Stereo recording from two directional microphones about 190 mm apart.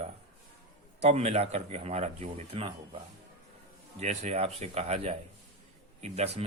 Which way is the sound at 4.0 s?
35° right (ahead or behind).